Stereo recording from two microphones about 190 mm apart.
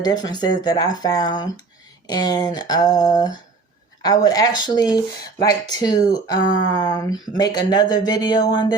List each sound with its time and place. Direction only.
0.0 s speech: 20° left (ahead or behind)